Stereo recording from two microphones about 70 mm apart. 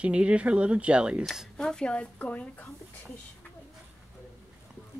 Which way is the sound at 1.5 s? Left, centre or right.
Centre.